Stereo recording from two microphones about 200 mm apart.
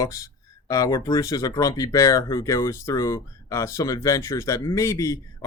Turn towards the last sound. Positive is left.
turn(degrees=15)  # may be behind; listen again after turning